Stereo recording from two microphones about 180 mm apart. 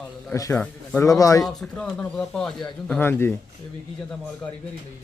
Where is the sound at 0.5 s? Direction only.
5° left (ahead or behind).